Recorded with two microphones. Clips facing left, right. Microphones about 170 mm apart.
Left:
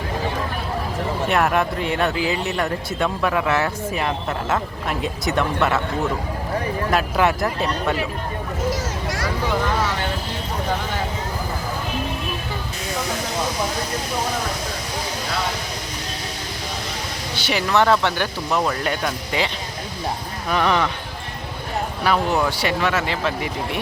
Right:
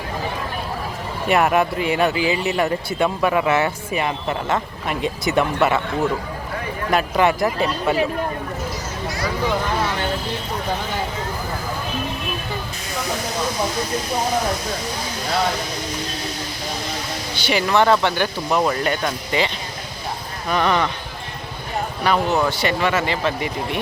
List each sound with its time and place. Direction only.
1.3 s speech: 5° right (ahead or behind)
6.9 s speech: centre (ahead or behind)
8.7 s a sound: 90° left
17.3 s speech: centre (ahead or behind)
20.5 s speech: 5° left (ahead or behind)
22.0 s speech: centre (ahead or behind)